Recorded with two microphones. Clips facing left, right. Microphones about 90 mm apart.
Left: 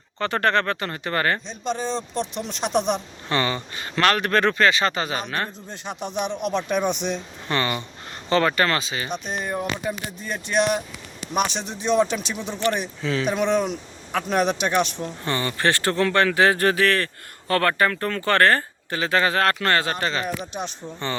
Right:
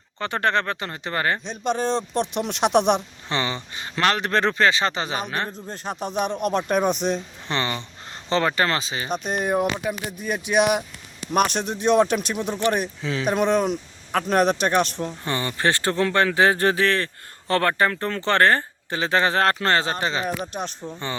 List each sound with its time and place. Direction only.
0.2 s speech: 15° right (ahead or behind)
1.5 s speech: 60° right (ahead or behind)
3.2 s speech: 20° right (ahead or behind)
5.6 s speech: 40° right (ahead or behind)
7.4 s speech: 25° right (ahead or behind)
9.0 s speech: 45° right (ahead or behind)
9.7 s speech: 10° right (ahead or behind)
11.4 s speech: 55° right (ahead or behind)
12.3 s speech: 10° right (ahead or behind)
13.2 s a man's voice: 5° right (ahead or behind)
15.2 s speech: 20° right (ahead or behind)
20.8 s a man's voice: centre (ahead or behind)